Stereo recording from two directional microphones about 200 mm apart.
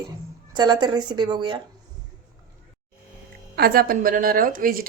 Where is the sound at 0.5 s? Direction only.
20° right (ahead or behind).